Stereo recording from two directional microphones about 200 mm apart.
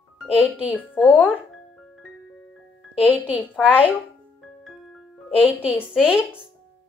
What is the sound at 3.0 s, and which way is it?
Speech, 5° right (ahead or behind).